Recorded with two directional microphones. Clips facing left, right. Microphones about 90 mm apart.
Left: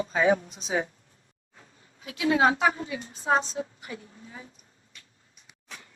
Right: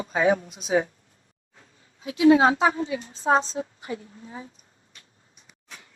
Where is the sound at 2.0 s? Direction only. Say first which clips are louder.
Right 6 dB; 25° right (ahead or behind).